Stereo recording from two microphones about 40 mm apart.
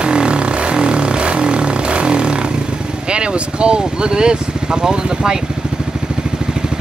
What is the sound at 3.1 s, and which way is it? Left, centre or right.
Speech, right.